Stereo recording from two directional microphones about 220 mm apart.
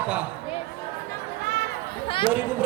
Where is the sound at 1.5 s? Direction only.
45° right (ahead or behind).